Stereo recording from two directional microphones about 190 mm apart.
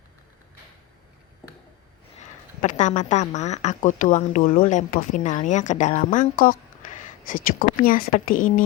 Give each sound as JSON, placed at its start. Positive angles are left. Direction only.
{"t": 2.6, "sound": "a woman's voice", "side_deg": 40}